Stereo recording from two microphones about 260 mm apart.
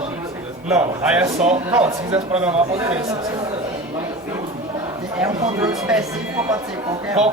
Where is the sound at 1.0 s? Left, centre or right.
Centre.